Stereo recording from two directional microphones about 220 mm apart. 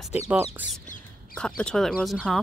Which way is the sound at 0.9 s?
35° left (ahead or behind).